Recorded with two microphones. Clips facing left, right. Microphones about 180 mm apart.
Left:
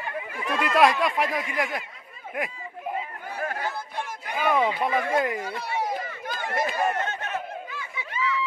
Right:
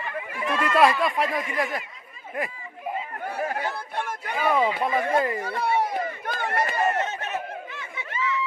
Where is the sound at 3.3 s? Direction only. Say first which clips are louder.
Right 3 dB; 60° right (ahead or behind).